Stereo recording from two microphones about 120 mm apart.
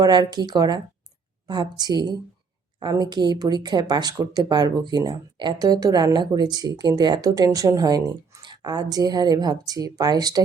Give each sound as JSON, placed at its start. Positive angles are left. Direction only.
{"t": 0.0, "sound": "a woman's voice", "side_deg": -35}